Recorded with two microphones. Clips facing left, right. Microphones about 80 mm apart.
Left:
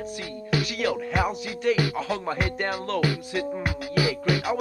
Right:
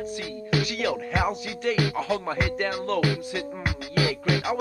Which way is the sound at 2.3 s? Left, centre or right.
Centre.